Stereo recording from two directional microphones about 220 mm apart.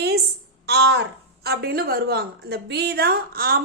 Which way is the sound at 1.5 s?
45° right (ahead or behind).